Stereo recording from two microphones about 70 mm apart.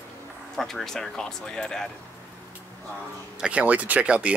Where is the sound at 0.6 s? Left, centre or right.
Centre.